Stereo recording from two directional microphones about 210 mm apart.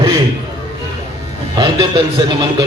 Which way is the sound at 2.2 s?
20° right (ahead or behind).